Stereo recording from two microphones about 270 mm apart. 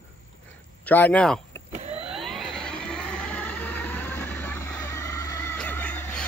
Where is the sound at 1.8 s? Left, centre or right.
Right.